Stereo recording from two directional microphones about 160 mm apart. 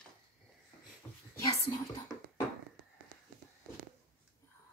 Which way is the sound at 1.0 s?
10° left (ahead or behind).